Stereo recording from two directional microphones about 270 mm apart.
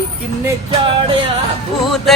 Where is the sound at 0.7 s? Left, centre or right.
Centre.